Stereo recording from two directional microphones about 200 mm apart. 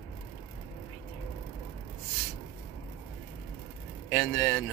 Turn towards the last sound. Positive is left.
turn(degrees=15)  # may be behind; listen again after turning